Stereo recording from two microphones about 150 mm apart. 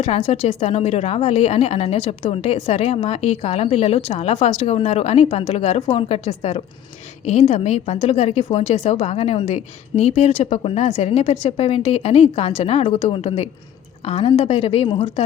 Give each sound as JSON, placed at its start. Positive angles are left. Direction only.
{"t": 0.0, "sound": "a woman's voice", "side_deg": 40}